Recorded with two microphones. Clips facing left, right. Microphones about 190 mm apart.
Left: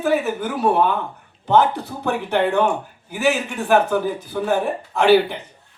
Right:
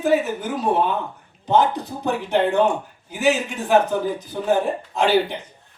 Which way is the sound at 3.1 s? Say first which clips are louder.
Even; 20° right (ahead or behind).